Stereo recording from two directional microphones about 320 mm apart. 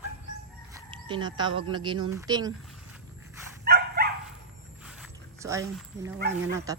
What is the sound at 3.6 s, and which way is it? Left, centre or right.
Dog, right.